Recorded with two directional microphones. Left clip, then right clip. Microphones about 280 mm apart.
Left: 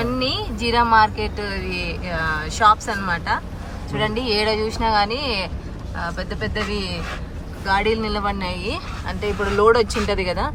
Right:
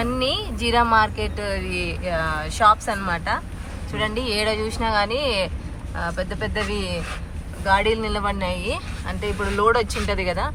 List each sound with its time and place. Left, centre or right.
0.0 s speech: centre